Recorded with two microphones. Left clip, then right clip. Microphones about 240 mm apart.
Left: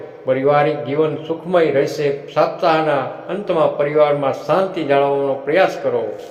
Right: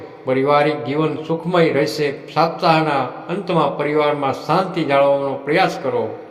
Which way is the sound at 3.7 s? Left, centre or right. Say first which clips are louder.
Left 3 dB; right.